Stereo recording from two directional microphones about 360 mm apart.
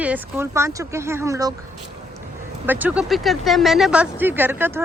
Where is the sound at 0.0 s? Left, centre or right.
Centre.